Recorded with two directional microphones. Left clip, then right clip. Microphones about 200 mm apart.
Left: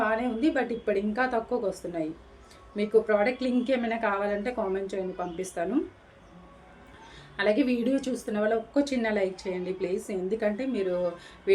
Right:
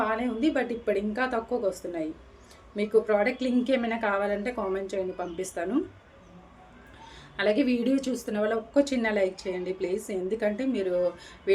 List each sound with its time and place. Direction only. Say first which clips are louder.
0.0 s speech: left 1 dB; 10° right (ahead or behind)
7.3 s speech: even; 10° right (ahead or behind)